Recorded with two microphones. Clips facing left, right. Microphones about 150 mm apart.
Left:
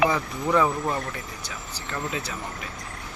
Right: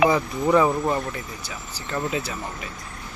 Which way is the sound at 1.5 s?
5° right (ahead or behind).